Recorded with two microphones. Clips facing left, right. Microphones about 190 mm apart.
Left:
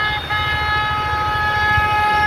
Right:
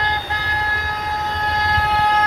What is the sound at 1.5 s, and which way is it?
Vehicle, 40° right (ahead or behind).